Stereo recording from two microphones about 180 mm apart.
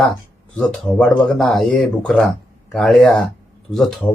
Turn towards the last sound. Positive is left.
turn(degrees=0)  # may be behind; listen again after turning